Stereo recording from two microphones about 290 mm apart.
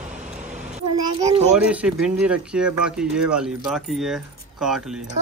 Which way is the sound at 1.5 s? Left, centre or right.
Centre.